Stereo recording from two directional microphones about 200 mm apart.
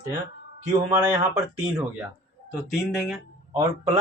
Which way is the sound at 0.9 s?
15° right (ahead or behind).